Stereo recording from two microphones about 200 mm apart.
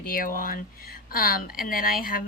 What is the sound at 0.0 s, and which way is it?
A woman's voice, 45° left (ahead or behind).